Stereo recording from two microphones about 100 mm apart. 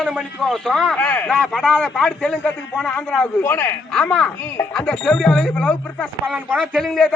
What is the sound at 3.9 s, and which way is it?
A man's voice, 10° left (ahead or behind).